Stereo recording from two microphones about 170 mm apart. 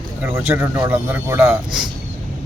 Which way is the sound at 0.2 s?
15° right (ahead or behind).